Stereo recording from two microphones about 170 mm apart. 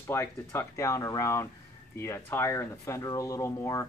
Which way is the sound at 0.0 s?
15° left (ahead or behind).